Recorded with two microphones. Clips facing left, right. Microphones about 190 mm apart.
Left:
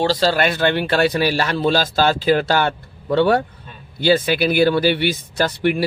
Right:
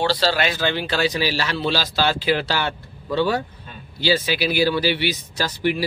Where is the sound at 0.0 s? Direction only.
45° left (ahead or behind).